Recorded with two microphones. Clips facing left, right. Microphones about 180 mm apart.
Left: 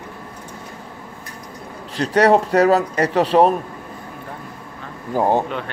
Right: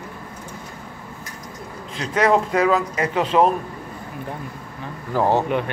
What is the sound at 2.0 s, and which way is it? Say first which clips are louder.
Speech: left 4 dB; 35° left (ahead or behind).